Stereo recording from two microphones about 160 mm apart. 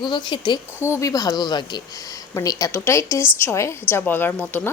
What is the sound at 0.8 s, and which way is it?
A woman's voice, 15° left (ahead or behind).